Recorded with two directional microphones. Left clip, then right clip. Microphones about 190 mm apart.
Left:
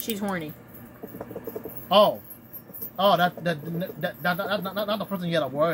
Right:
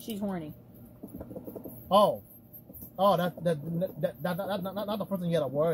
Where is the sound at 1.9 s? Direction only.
55° right (ahead or behind).